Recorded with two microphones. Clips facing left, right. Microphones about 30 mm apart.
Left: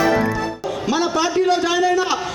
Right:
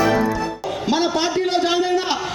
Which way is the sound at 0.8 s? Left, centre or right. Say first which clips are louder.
Even; right.